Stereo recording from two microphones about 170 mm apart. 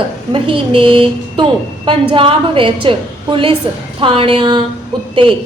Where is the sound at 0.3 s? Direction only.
30° right (ahead or behind).